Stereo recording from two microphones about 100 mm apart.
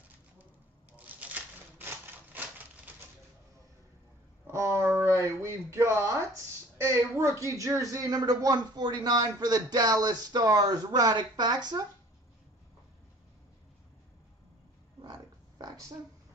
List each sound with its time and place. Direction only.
0.9 s typewriter: 15° right (ahead or behind)
4.5 s speech: 30° right (ahead or behind); by 11.8 s 45° right (ahead or behind)
15.0 s a sound: 45° right (ahead or behind)